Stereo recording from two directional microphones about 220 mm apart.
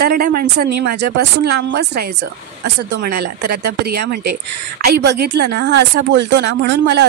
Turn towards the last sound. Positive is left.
turn(degrees=-50)  # may be behind; listen again after turning